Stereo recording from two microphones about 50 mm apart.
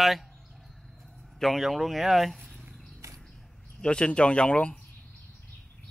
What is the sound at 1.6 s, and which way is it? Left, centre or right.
Speech, centre.